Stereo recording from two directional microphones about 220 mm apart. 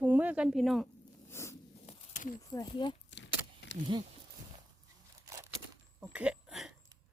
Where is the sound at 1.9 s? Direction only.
35° left (ahead or behind).